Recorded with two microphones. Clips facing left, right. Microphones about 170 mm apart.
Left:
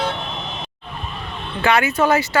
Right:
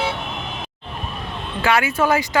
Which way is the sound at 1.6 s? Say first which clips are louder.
Left 1 dB; 5° right (ahead or behind).